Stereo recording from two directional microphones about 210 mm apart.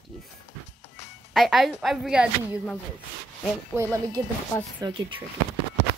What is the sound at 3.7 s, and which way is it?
A woman's voice, 15° right (ahead or behind).